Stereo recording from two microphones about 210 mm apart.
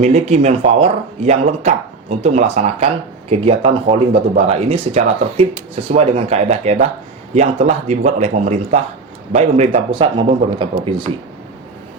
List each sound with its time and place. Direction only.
0.0 s speech: 30° right (ahead or behind)